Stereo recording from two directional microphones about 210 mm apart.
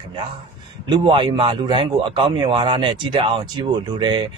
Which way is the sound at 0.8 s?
20° right (ahead or behind).